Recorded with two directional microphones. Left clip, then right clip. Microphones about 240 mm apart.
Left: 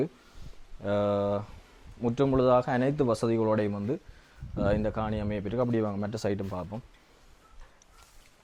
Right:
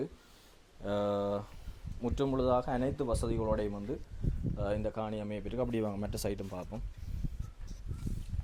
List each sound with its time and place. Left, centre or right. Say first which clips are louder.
0.8 s speech: left 5 dB; left